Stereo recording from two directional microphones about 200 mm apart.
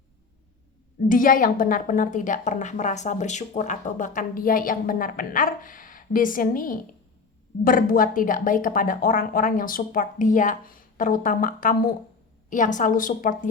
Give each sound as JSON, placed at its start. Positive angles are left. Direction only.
{"t": 1.0, "sound": "a woman's voice", "side_deg": 45}